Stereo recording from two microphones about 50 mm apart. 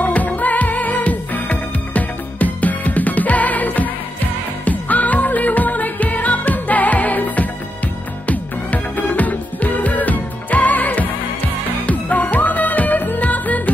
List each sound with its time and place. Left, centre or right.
0.0 s music: left